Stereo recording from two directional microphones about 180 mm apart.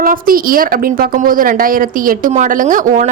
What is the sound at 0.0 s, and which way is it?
A woman's voice, 50° right (ahead or behind).